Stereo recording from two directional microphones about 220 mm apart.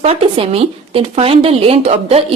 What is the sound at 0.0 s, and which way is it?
A woman's voice, 25° right (ahead or behind).